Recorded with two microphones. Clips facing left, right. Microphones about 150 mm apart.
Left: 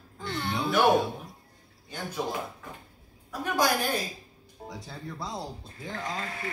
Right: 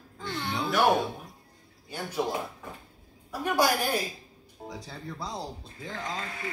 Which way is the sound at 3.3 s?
10° right (ahead or behind).